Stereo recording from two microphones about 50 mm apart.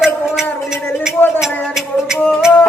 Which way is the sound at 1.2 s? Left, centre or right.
Left.